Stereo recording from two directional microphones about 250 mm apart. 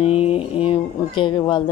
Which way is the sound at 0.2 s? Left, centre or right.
Left.